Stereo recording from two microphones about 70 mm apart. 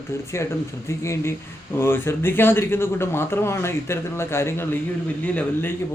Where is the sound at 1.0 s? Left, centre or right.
Left.